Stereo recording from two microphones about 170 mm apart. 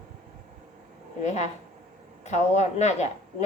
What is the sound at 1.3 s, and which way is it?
Speech, 40° left (ahead or behind).